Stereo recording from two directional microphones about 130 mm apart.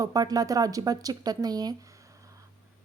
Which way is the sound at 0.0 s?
30° right (ahead or behind).